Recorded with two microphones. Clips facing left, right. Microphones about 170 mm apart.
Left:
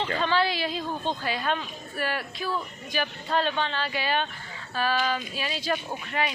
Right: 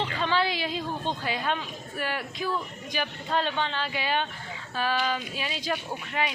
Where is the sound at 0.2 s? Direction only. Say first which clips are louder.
Left 1 dB; 15° right (ahead or behind).